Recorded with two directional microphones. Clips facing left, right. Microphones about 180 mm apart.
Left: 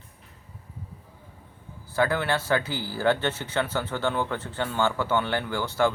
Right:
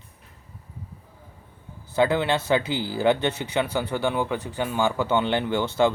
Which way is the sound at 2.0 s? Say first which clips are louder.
Right 3 dB; 20° right (ahead or behind).